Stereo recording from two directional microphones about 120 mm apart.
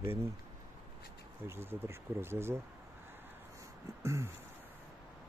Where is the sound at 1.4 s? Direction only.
20° right (ahead or behind).